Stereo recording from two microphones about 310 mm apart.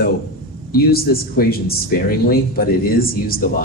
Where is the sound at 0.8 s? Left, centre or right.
Left.